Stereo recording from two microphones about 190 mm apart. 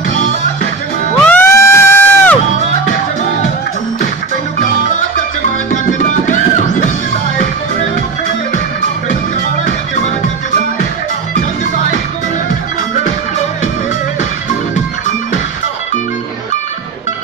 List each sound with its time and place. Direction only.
1.2 s crowd: 10° left (ahead or behind)
5.7 s music: 40° left (ahead or behind)